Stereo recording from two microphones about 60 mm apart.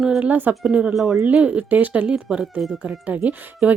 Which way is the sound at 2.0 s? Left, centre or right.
Centre.